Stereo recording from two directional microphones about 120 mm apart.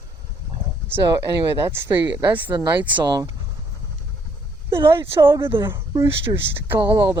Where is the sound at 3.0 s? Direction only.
30° right (ahead or behind).